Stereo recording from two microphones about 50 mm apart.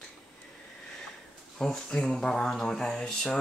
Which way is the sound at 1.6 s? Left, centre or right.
Centre.